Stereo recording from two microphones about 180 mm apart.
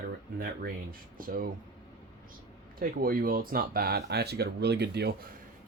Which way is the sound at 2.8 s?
55° right (ahead or behind).